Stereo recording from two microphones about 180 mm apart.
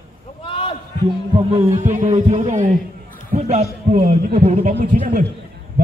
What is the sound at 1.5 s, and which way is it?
A man's voice, 40° right (ahead or behind).